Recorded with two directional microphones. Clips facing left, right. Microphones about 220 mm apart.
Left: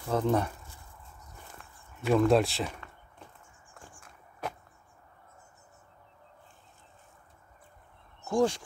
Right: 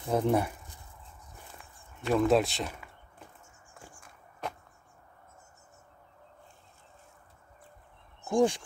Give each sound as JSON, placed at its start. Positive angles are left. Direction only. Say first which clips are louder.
{"t": 0.0, "sound": "speech", "louder": "right 1 dB", "side_deg": -15}
{"t": 2.0, "sound": "speech", "louder": "left 1 dB", "side_deg": 0}
{"t": 4.0, "sound": "walk", "louder": "left 1 dB", "side_deg": 5}
{"t": 8.3, "sound": "speech", "louder": "right 1 dB", "side_deg": -15}